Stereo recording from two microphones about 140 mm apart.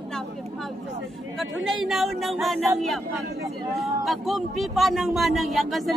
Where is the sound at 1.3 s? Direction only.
Centre (ahead or behind).